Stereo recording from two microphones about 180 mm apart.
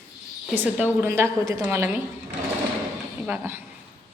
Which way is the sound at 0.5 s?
10° right (ahead or behind).